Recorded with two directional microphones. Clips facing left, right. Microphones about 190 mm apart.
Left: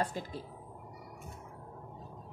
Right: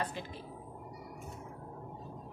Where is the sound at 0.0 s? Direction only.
45° left (ahead or behind).